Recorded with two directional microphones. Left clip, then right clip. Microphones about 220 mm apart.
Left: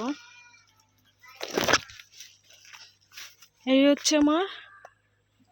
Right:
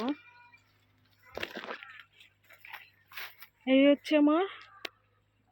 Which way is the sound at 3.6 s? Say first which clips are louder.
Left 3 dB; 15° left (ahead or behind).